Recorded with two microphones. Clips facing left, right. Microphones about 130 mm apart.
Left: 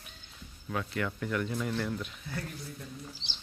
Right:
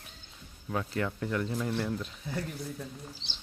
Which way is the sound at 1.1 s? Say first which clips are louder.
Right 1 dB; 25° right (ahead or behind).